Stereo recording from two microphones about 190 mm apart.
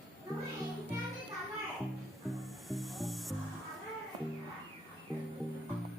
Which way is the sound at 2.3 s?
Centre (ahead or behind).